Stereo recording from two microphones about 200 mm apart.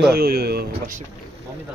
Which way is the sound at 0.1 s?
50° right (ahead or behind).